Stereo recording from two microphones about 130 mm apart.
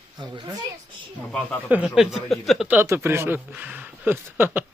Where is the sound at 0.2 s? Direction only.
35° right (ahead or behind).